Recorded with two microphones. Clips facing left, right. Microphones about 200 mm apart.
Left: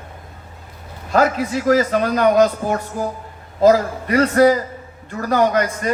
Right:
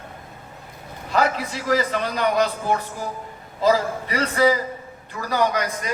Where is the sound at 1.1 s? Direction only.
50° left (ahead or behind).